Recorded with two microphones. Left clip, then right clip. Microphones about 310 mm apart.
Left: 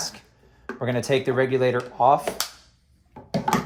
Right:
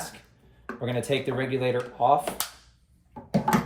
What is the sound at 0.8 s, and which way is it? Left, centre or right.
Speech, centre.